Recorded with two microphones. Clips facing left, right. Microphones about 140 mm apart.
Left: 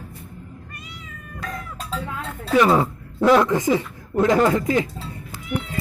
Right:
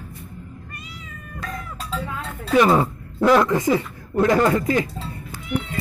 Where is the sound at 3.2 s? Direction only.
Centre (ahead or behind).